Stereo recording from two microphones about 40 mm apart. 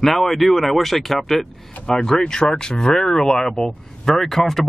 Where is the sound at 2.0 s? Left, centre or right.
Centre.